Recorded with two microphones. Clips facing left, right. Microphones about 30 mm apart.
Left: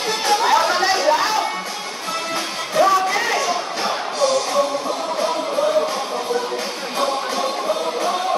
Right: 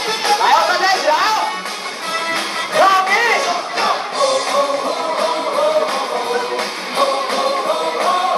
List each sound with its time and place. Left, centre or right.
0.2 s chatter: right
2.7 s music: right